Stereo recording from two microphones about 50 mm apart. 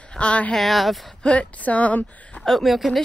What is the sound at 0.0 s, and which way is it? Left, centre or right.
Speech, left.